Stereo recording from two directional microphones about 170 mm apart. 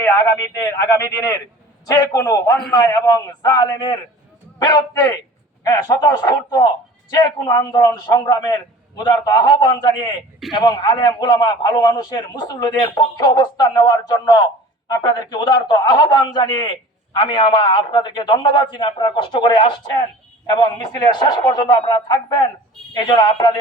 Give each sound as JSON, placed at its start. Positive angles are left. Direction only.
{"t": 0.0, "sound": "a man's voice", "side_deg": 15}
{"t": 21.1, "sound": "a man's voice", "side_deg": 25}